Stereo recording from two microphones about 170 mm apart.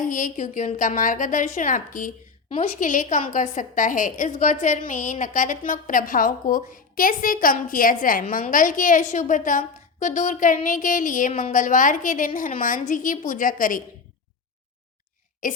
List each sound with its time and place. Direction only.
0.0 s a woman's voice: 50° left (ahead or behind)
15.4 s a woman's voice: 50° left (ahead or behind)